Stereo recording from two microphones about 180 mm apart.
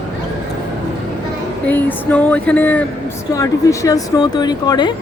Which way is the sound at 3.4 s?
20° left (ahead or behind).